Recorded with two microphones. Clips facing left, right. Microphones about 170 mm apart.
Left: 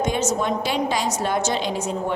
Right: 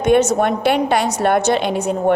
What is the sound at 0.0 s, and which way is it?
A woman's voice, 65° right (ahead or behind).